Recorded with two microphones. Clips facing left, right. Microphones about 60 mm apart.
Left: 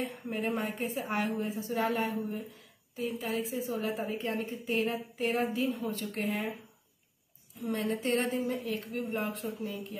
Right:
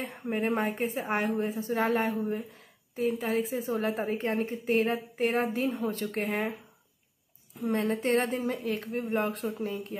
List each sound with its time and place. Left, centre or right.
0.0 s a woman's voice: right
7.7 s speech: right
9.5 s a woman's voice: right